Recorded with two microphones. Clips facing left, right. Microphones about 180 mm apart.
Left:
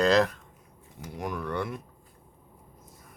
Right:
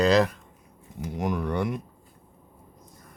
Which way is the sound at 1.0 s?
20° right (ahead or behind).